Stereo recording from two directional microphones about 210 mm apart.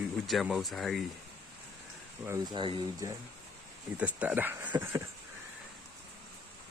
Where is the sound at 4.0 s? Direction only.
5° right (ahead or behind).